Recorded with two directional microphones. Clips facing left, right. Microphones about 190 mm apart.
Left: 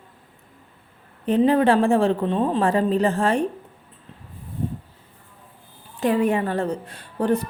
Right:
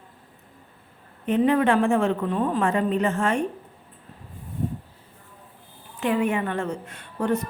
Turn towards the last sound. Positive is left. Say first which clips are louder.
# left 3 dB
turn(degrees=35)  # may be behind; listen again after turning